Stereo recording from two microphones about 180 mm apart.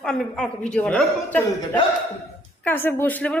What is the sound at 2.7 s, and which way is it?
Speech, 10° left (ahead or behind).